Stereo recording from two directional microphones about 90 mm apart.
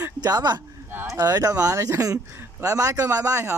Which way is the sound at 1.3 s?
40° right (ahead or behind).